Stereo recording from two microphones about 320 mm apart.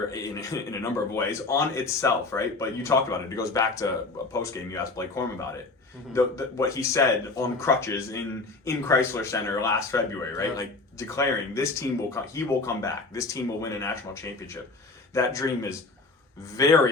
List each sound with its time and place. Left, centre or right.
0.1 s speech: centre
16.6 s speech: centre